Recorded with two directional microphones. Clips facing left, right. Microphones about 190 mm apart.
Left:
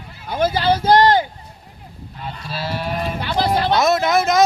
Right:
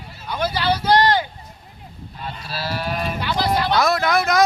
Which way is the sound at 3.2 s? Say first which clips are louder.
Left 2 dB; 55° left (ahead or behind).